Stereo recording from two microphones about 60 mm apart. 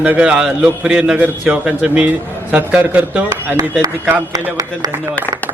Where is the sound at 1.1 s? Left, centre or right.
Right.